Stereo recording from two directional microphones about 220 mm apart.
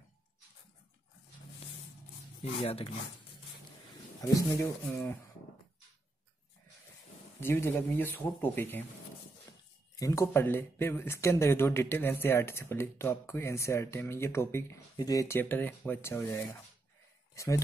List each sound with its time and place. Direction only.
2.6 s speech: 25° left (ahead or behind)
4.2 s speech: 15° left (ahead or behind)
7.3 s speech: 10° left (ahead or behind)